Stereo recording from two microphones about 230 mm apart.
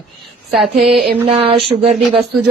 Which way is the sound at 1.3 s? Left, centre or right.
Right.